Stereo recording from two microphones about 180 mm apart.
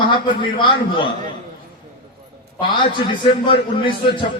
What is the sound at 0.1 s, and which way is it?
A man's voice, 25° left (ahead or behind).